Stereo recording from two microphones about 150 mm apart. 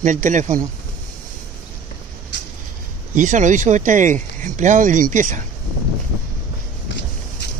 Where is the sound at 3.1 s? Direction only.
55° right (ahead or behind).